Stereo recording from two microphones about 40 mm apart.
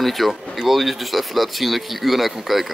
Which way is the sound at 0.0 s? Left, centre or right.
Centre.